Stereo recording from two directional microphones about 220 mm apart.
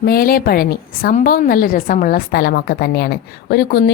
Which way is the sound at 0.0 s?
45° left (ahead or behind).